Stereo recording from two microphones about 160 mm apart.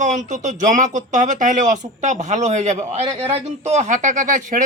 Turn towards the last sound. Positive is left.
turn(degrees=-55)  # may be behind; listen again after turning